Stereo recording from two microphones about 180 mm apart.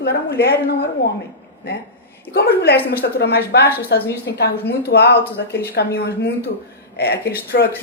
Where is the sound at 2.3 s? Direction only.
65° left (ahead or behind).